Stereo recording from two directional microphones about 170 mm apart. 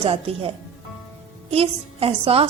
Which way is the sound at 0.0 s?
35° right (ahead or behind).